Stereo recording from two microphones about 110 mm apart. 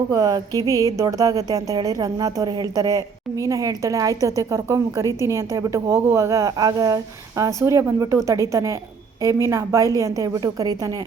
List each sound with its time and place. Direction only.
0.1 s a woman's voice: 35° right (ahead or behind)